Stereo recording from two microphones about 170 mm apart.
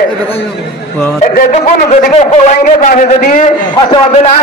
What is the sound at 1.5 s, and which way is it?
A man's voice, 40° left (ahead or behind).